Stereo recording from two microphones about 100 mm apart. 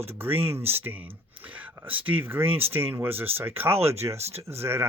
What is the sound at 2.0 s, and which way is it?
Speech, 20° right (ahead or behind).